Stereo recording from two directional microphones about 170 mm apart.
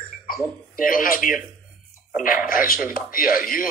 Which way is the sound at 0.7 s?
55° left (ahead or behind).